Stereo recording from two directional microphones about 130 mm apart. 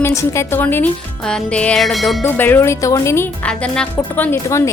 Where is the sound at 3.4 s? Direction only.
10° left (ahead or behind).